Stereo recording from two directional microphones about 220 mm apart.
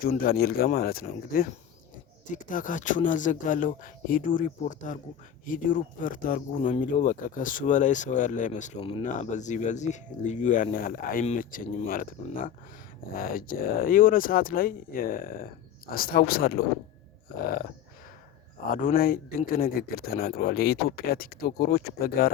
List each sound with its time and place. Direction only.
0.0 s speech: 40° left (ahead or behind)
18.5 s speech: 40° left (ahead or behind)